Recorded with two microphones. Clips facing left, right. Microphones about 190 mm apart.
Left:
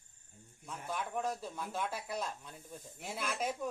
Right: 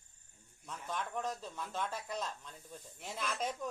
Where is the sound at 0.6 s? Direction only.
10° left (ahead or behind).